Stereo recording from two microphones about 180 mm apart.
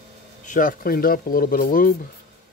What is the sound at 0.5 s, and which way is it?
Speech, 50° left (ahead or behind).